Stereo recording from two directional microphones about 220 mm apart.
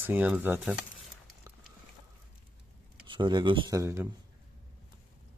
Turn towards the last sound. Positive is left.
turn(degrees=-15)  # may be behind; listen again after turning